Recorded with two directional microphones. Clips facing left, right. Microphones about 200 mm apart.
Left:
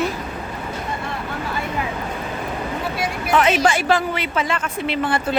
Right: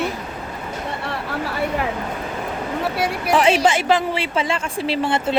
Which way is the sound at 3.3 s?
30° right (ahead or behind).